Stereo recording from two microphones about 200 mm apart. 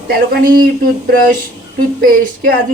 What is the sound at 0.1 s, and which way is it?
Speech, 45° right (ahead or behind).